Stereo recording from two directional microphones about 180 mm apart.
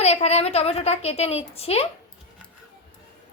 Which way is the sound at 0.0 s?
35° left (ahead or behind).